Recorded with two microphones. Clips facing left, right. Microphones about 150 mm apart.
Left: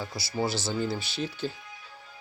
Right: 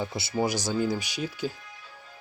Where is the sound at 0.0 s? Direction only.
20° right (ahead or behind).